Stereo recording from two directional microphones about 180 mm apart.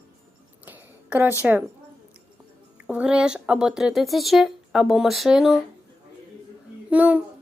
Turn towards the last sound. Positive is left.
turn(degrees=-10)  # may be behind; listen again after turning